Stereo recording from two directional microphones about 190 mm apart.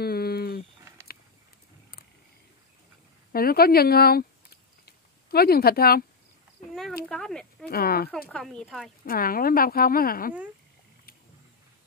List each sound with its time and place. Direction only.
0.0 s a sound: 55° left (ahead or behind)
3.3 s a sound: 50° left (ahead or behind)
7.1 s speech: 5° left (ahead or behind)
7.6 s speech: 55° left (ahead or behind)
8.1 s speech: 5° left (ahead or behind)
9.0 s speech: 50° left (ahead or behind)